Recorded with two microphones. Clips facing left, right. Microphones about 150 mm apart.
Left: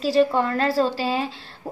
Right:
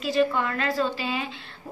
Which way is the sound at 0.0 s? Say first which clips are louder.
Left 4 dB; 35° left (ahead or behind).